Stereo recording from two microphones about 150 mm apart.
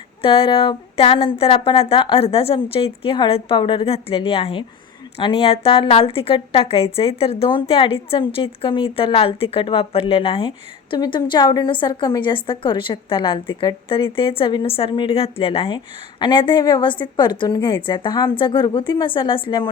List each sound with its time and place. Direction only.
0.2 s a woman's voice: 35° left (ahead or behind)